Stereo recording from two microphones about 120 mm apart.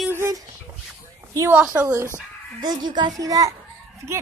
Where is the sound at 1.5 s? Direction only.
10° right (ahead or behind).